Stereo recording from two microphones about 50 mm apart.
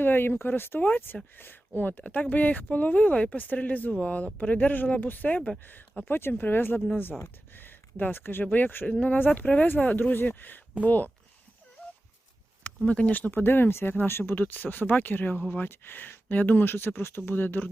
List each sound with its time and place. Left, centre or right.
0.0 s speech: left
0.8 s speech: left
6.1 s speech: left
12.6 s speech: left
13.3 s speech: left
14.3 s speech: left